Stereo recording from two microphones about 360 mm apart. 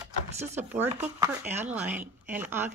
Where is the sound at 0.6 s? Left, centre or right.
Centre.